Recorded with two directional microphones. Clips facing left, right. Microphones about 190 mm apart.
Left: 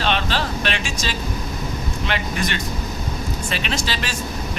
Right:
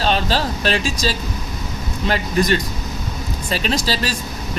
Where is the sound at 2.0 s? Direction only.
35° right (ahead or behind).